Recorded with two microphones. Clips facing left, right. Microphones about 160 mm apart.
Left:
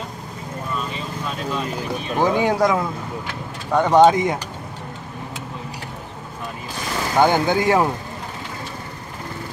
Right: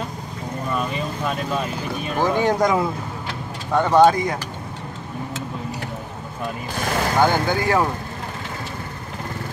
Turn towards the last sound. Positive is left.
turn(degrees=20)  # may be behind; listen again after turning